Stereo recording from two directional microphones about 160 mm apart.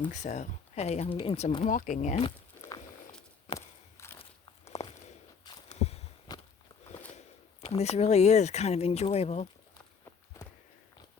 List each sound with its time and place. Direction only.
0.1 s speech: 45° left (ahead or behind)
1.7 s speech: 55° left (ahead or behind)
3.5 s a sound: 40° left (ahead or behind)
3.9 s walk: 15° left (ahead or behind)
4.2 s biting: 40° left (ahead or behind)
5.6 s a sound: 40° left (ahead or behind)
7.6 s speech: 40° left (ahead or behind)